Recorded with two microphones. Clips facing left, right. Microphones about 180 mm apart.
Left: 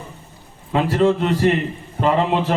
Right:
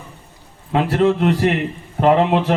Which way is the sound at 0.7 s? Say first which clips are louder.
Right 1 dB; 60° right (ahead or behind).